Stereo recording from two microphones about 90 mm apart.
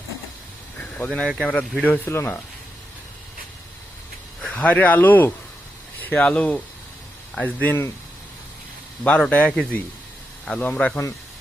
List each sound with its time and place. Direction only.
0.8 s vehicle: 15° left (ahead or behind)
1.4 s speech: 15° left (ahead or behind)
4.5 s speech: 15° left (ahead or behind)
9.0 s speech: 15° left (ahead or behind)